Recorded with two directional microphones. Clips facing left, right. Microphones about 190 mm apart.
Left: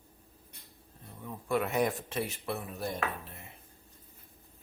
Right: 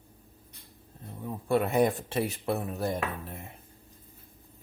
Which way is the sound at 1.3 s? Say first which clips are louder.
Right 4 dB; 30° right (ahead or behind).